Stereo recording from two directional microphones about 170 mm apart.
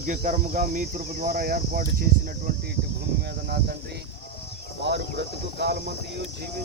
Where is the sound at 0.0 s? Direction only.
45° right (ahead or behind).